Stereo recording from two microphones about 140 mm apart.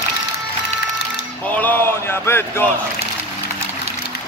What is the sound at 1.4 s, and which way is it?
Speech, 10° left (ahead or behind).